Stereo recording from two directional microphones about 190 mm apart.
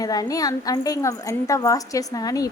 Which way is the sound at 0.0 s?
20° left (ahead or behind).